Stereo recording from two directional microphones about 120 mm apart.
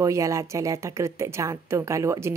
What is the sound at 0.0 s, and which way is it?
Speech, 25° right (ahead or behind).